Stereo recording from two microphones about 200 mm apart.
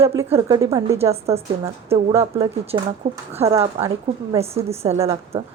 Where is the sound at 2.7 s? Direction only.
20° right (ahead or behind).